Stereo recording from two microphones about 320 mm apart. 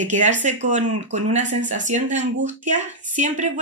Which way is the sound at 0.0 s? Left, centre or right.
Right.